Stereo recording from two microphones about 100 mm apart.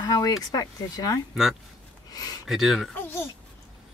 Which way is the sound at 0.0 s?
40° left (ahead or behind).